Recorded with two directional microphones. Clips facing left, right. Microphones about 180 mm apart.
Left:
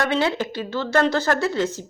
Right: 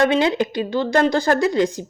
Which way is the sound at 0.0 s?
15° right (ahead or behind).